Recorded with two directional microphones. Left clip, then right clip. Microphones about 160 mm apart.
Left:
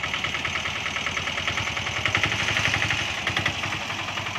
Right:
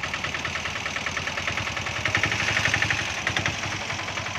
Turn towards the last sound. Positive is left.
turn(degrees=10)  # may be behind; listen again after turning